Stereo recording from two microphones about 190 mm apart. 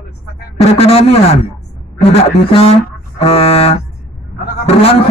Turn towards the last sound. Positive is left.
turn(degrees=30)  # may be behind; listen again after turning